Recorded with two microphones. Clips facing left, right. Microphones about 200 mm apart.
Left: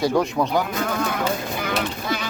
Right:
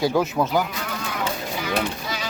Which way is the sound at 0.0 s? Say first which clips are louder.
Left 1 dB; 5° right (ahead or behind).